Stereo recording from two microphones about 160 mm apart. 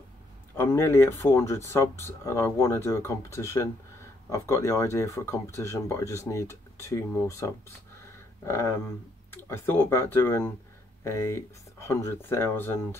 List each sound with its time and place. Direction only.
0.6 s speech: 15° left (ahead or behind)